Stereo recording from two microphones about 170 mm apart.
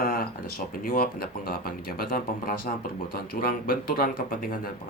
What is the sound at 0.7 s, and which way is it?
A man's voice, 55° left (ahead or behind).